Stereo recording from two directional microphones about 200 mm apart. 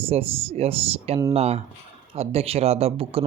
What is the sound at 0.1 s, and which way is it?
Speech, 30° right (ahead or behind).